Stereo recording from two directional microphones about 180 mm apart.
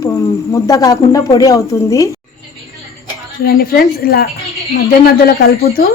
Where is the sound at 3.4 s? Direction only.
55° left (ahead or behind).